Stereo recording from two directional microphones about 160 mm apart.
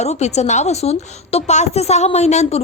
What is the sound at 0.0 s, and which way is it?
A woman's voice, 45° left (ahead or behind).